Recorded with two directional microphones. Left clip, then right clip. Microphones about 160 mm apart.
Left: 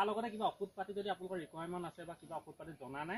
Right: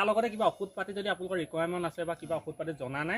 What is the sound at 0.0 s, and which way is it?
A man's voice, 20° right (ahead or behind).